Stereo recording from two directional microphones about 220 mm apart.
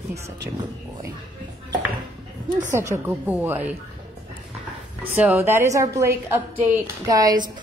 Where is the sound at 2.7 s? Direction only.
10° right (ahead or behind).